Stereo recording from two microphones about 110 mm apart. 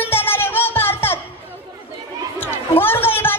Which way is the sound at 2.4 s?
20° left (ahead or behind).